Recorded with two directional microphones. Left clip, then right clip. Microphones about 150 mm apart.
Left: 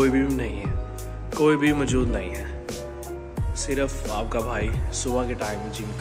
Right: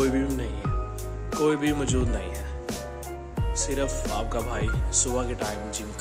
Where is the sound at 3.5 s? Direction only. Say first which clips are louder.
Left 2 dB; 20° right (ahead or behind).